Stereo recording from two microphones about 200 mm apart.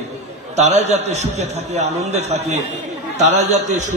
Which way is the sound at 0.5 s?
35° right (ahead or behind).